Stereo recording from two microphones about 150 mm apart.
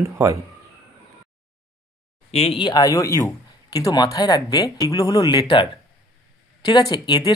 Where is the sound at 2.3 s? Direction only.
40° left (ahead or behind).